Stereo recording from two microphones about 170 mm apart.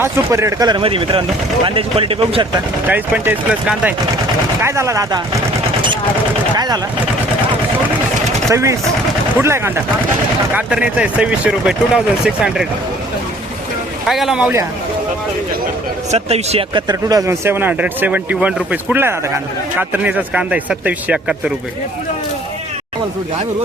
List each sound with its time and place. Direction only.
0.0 s speech: 15° right (ahead or behind); by 2.5 s 35° right (ahead or behind)
2.8 s speech: 10° right (ahead or behind)
8.4 s speech: 15° right (ahead or behind)
14.1 s speech: centre (ahead or behind)
16.1 s speech: 35° right (ahead or behind)
16.9 s speech: 20° right (ahead or behind)